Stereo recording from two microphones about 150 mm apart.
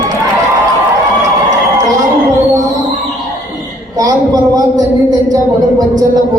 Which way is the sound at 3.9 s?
25° right (ahead or behind).